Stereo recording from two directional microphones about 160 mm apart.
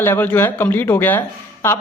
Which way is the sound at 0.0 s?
10° left (ahead or behind).